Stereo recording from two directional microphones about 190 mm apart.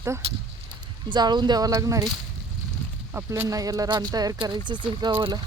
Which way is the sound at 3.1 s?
10° right (ahead or behind).